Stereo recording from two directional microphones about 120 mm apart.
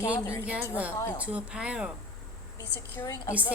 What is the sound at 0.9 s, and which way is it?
Speech, 20° left (ahead or behind).